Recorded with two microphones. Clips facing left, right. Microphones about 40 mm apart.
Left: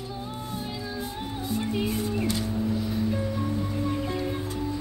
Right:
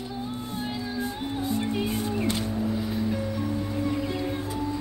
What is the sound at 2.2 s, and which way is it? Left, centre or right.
Vehicle, right.